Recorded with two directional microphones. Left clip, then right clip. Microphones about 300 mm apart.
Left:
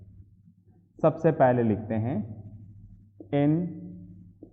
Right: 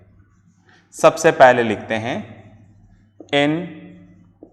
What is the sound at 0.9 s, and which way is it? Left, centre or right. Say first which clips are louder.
A man's voice: right 11 dB; centre.